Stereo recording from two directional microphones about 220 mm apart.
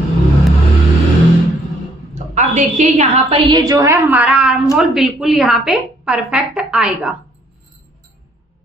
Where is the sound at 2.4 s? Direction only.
30° right (ahead or behind).